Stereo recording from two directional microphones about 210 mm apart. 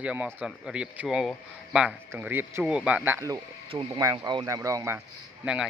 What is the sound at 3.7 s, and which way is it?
Speech, 25° right (ahead or behind).